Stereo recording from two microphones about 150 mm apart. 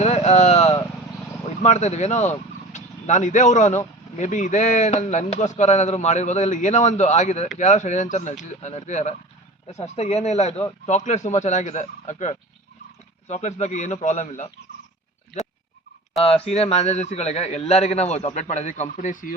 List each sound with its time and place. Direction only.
0.0 s a sound: 50° left (ahead or behind)
1.5 s speech: 50° left (ahead or behind)
16.1 s speech: 40° left (ahead or behind); by 19.3 s 60° left (ahead or behind)